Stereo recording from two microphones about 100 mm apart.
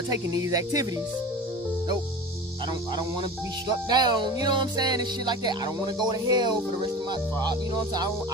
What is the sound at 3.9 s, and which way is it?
Speech, 45° right (ahead or behind).